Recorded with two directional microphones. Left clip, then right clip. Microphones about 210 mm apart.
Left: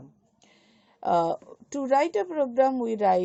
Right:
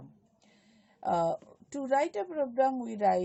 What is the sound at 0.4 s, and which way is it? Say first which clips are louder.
A woman's voice: left 6 dB; 30° left (ahead or behind).